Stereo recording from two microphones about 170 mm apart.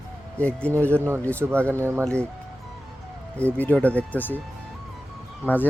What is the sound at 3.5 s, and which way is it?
Speech, 10° left (ahead or behind).